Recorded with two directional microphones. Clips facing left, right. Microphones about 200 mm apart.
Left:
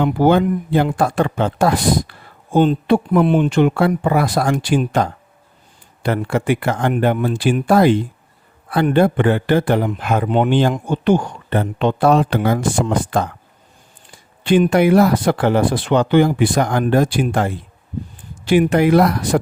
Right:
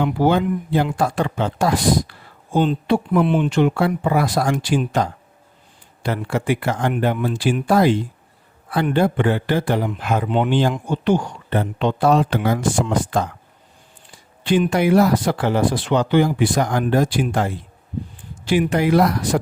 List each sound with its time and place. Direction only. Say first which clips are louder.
0.0 s speech: left 3 dB; 55° left (ahead or behind)
14.4 s speech: left 4 dB; 60° left (ahead or behind)